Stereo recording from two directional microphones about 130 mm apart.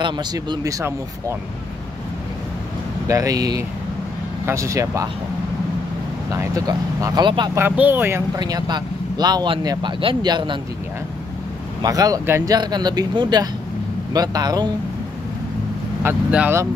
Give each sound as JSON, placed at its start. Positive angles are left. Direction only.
{"t": 0.0, "sound": "speech", "side_deg": -35}
{"t": 3.1, "sound": "speech", "side_deg": -25}
{"t": 6.3, "sound": "speech", "side_deg": -25}
{"t": 7.2, "sound": "speech", "side_deg": -35}
{"t": 7.5, "sound": "speech", "side_deg": -15}
{"t": 8.4, "sound": "speech", "side_deg": -30}
{"t": 11.8, "sound": "speech", "side_deg": -30}
{"t": 16.0, "sound": "speech", "side_deg": -10}